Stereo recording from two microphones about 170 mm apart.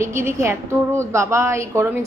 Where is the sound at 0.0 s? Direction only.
15° right (ahead or behind).